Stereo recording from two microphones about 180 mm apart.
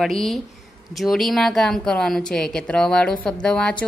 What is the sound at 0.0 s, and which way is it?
Speech, centre (ahead or behind).